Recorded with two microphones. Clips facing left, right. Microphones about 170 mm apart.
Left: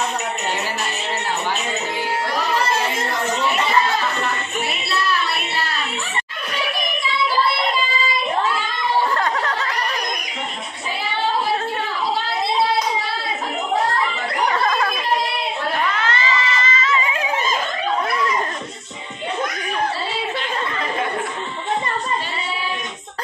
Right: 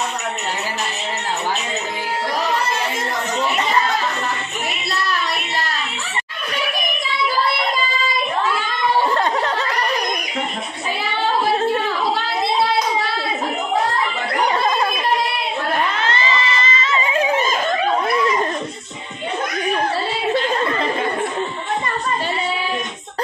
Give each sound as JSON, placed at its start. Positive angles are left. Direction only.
{"t": 16.0, "sound": "crowd", "side_deg": -25}